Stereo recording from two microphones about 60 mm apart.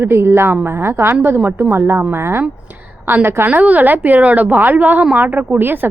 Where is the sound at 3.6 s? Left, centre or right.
Right.